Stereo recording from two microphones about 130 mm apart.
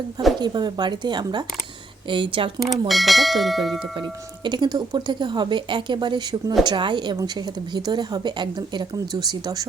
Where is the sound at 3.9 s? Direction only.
35° right (ahead or behind).